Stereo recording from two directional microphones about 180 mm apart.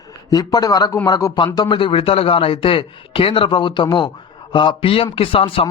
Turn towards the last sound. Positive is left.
turn(degrees=30)  # may be behind; listen again after turning